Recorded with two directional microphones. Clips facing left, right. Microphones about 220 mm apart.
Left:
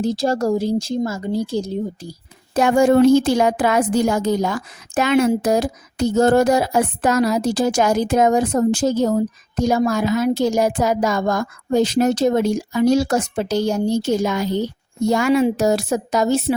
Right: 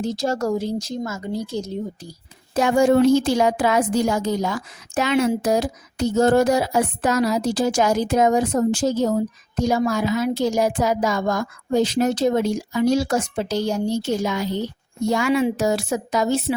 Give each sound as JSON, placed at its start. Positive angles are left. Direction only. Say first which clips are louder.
{"t": 0.0, "sound": "speech", "louder": "left 4 dB", "side_deg": 35}
{"t": 2.6, "sound": "a woman's voice", "louder": "left 2 dB", "side_deg": 55}